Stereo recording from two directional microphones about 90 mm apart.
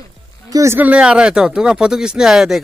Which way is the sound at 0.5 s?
35° right (ahead or behind).